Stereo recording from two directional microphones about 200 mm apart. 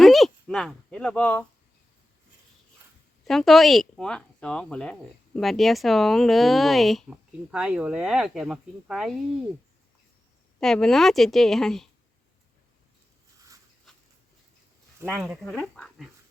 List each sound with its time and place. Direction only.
0.0 s speech: centre (ahead or behind)
3.2 s speech: centre (ahead or behind)
10.6 s speech: centre (ahead or behind)
13.9 s a sound: centre (ahead or behind)
15.1 s speech: 10° right (ahead or behind)
15.4 s speech: centre (ahead or behind)